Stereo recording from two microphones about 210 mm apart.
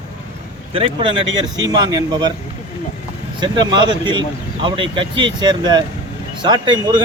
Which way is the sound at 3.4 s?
20° right (ahead or behind).